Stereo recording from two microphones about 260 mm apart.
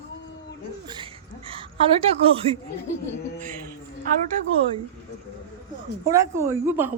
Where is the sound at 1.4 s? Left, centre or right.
Right.